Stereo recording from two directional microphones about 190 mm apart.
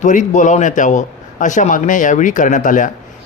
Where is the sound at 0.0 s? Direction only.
40° left (ahead or behind).